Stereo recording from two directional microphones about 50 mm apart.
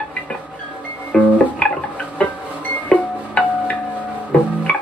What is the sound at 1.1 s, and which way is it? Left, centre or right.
Music, centre.